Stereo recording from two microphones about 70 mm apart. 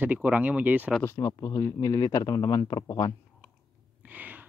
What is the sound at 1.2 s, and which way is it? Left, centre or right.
Speech, left.